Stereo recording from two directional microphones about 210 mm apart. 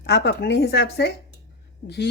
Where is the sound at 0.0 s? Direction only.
55° left (ahead or behind).